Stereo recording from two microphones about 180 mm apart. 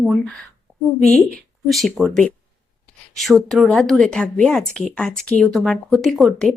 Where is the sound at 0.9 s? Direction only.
40° left (ahead or behind).